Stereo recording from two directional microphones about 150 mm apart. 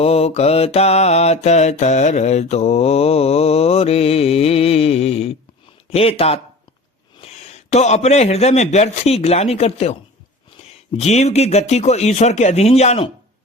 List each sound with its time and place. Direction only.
0.0 s mantra: 40° left (ahead or behind)
5.9 s a man's voice: 40° left (ahead or behind)
10.9 s mantra: 45° left (ahead or behind)